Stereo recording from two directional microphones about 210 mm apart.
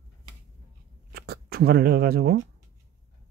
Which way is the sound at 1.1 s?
50° right (ahead or behind).